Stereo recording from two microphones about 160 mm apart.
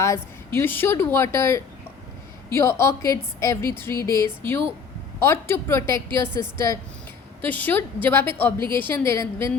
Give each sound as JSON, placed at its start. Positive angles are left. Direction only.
{"t": 0.0, "sound": "a woman's voice", "side_deg": 15}